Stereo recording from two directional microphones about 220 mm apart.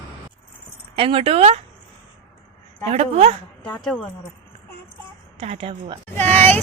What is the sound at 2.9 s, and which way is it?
Speech, 30° right (ahead or behind).